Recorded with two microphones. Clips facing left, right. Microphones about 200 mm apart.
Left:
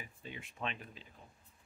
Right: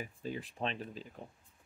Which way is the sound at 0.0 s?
40° right (ahead or behind).